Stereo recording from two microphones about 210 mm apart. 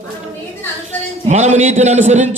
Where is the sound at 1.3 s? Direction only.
35° right (ahead or behind).